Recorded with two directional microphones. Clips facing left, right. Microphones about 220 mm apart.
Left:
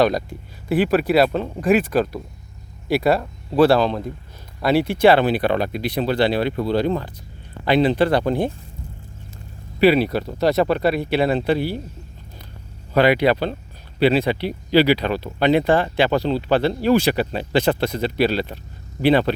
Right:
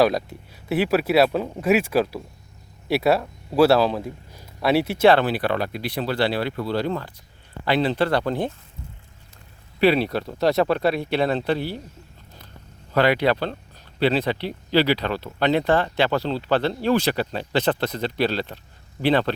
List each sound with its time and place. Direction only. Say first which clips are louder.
0.0 s speech: left 1 dB; 5° right (ahead or behind)
5.1 s speech: left 3 dB; 20° left (ahead or behind)
9.8 s speech: left 3 dB; centre (ahead or behind)
12.9 s speech: left 3 dB; 15° left (ahead or behind)